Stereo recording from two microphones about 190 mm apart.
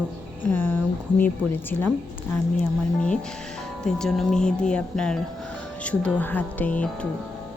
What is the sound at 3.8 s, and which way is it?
Speech, 5° left (ahead or behind).